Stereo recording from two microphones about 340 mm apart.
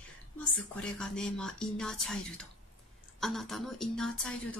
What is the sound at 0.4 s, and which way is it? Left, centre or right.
Speech, centre.